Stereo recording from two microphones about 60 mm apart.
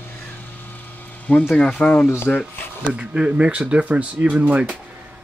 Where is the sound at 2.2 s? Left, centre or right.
Left.